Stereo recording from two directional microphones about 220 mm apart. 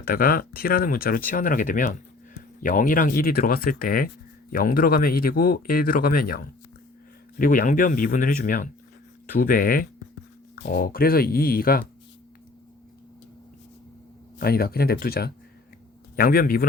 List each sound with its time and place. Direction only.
0.0 s speech: 40° left (ahead or behind)
14.3 s speech: 45° left (ahead or behind)